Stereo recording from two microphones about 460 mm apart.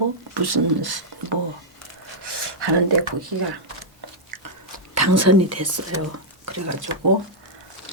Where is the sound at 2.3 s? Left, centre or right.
Right.